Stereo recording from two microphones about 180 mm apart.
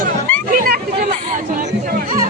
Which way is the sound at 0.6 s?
55° right (ahead or behind).